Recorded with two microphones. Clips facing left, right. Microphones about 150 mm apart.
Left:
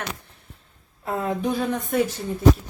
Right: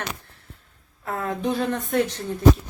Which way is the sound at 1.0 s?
20° left (ahead or behind).